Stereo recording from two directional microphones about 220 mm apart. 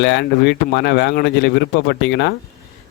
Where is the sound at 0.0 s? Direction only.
50° left (ahead or behind).